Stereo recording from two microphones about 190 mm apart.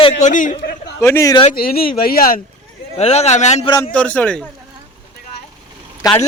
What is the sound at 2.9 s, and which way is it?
Speech, 35° left (ahead or behind).